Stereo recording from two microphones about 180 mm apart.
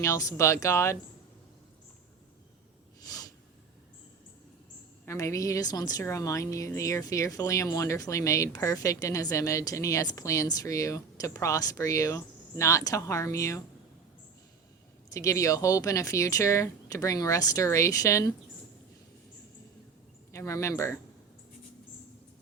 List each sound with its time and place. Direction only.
0.0 s a woman's voice: 15° left (ahead or behind)
3.0 s snort: 20° left (ahead or behind)
5.0 s a woman's voice: 15° left (ahead or behind)
15.1 s a woman's voice: 15° left (ahead or behind)
20.3 s a woman's voice: 15° left (ahead or behind)